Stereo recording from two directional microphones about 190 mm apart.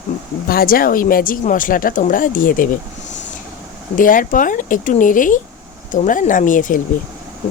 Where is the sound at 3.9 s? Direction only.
45° left (ahead or behind).